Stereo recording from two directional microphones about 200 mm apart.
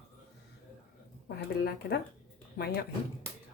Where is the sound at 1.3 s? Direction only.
55° left (ahead or behind).